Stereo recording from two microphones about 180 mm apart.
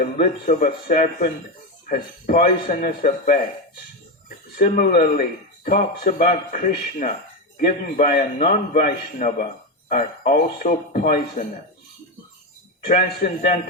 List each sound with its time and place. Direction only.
0.0 s a man's voice: 45° left (ahead or behind)
4.5 s a man's voice: 50° left (ahead or behind)
12.8 s a man's voice: 50° left (ahead or behind)